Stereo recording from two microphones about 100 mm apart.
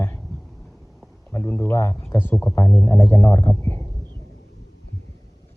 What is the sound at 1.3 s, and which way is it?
Speech, 25° left (ahead or behind).